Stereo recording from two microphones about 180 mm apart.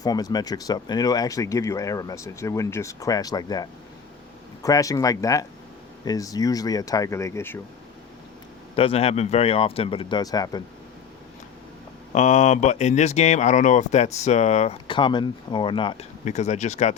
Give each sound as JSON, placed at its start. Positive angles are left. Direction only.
{"t": 0.0, "sound": "speech", "side_deg": 20}
{"t": 8.7, "sound": "speech", "side_deg": 35}
{"t": 12.1, "sound": "speech", "side_deg": 40}
{"t": 16.2, "sound": "speech", "side_deg": 40}